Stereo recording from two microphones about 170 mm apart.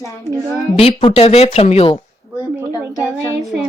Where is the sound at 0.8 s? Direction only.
30° left (ahead or behind).